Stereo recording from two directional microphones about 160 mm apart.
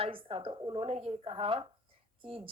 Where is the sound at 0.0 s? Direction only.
35° right (ahead or behind).